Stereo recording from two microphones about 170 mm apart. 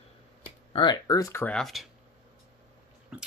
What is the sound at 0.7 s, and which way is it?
Speech, 25° left (ahead or behind).